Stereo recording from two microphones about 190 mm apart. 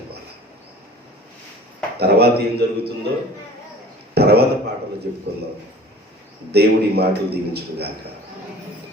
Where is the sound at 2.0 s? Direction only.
60° right (ahead or behind).